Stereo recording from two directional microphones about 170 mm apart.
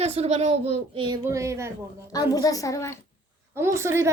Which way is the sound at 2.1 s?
20° left (ahead or behind).